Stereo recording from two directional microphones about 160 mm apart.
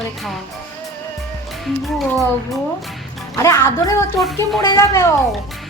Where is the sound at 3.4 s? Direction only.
20° left (ahead or behind).